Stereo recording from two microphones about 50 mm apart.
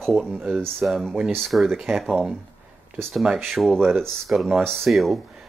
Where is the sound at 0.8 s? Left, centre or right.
Centre.